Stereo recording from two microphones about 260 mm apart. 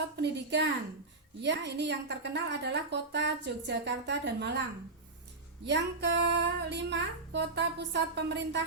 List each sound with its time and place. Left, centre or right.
0.2 s a woman's voice: right
5.6 s a woman's voice: right